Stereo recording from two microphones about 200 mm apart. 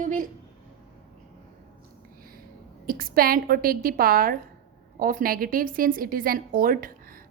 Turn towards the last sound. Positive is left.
turn(degrees=-45)  # may be behind; listen again after turning